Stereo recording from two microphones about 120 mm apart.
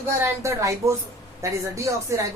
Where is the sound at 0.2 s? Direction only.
25° right (ahead or behind).